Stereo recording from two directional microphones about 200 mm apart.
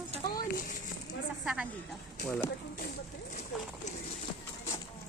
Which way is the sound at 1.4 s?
5° right (ahead or behind).